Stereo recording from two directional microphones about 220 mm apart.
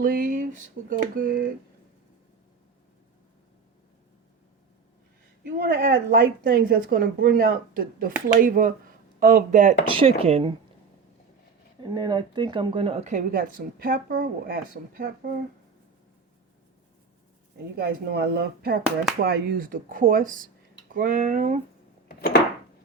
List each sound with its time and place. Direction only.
0.0 s speech: 40° right (ahead or behind)
5.4 s speech: 45° right (ahead or behind); by 10.5 s 25° right (ahead or behind)
11.8 s speech: 20° right (ahead or behind); by 15.3 s 40° right (ahead or behind)
17.7 s speech: 45° right (ahead or behind)